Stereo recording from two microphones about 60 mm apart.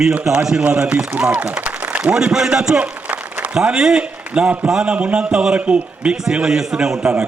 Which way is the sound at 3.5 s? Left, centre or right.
Centre.